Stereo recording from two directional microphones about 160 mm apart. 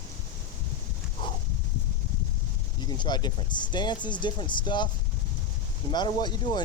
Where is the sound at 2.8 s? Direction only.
25° left (ahead or behind).